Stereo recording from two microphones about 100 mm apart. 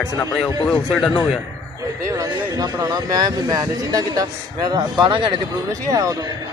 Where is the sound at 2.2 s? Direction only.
40° right (ahead or behind).